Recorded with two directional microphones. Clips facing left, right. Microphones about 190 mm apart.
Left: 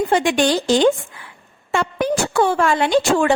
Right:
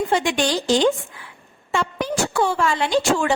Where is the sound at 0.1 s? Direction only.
55° left (ahead or behind).